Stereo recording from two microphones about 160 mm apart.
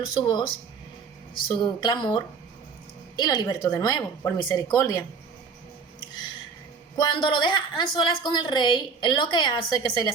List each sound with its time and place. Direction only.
0.0 s a woman's voice: 30° left (ahead or behind)
6.9 s a woman's voice: 30° left (ahead or behind)